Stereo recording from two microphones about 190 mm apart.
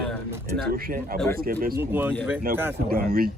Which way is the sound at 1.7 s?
10° right (ahead or behind).